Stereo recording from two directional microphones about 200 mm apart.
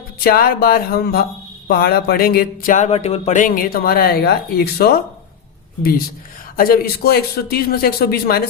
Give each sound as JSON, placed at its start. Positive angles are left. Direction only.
{"t": 0.2, "sound": "speech", "side_deg": 45}
{"t": 6.6, "sound": "speech", "side_deg": 50}